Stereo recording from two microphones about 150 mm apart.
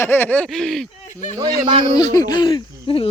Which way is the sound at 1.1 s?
55° left (ahead or behind).